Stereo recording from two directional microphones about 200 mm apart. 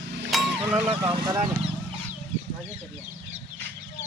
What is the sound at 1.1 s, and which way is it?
Speech, 25° right (ahead or behind).